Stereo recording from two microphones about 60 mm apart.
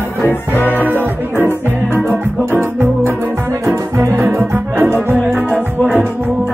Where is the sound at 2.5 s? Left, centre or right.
Right.